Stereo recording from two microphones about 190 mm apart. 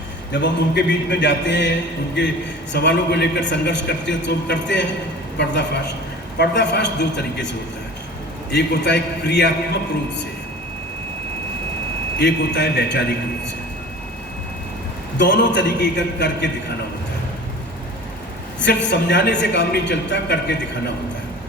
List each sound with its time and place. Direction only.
0.3 s a man's voice: 65° left (ahead or behind)
2.7 s a man's voice: 60° left (ahead or behind)
6.4 s a man's voice: 65° left (ahead or behind)
12.2 s a man's voice: 65° left (ahead or behind)
15.2 s a man's voice: 70° left (ahead or behind)
18.6 s a man's voice: 65° left (ahead or behind)